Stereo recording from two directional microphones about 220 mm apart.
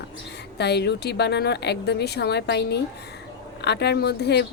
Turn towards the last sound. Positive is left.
turn(degrees=50)  # may be behind; listen again after turning